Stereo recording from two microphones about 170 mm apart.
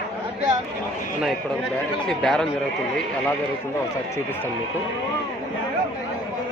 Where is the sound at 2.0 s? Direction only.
5° left (ahead or behind).